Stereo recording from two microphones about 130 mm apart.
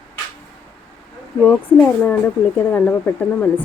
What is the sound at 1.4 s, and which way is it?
Speech, 15° left (ahead or behind).